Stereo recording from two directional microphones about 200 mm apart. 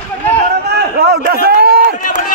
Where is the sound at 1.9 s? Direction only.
40° left (ahead or behind).